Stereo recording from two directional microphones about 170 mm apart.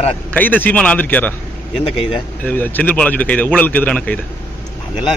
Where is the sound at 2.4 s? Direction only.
10° left (ahead or behind).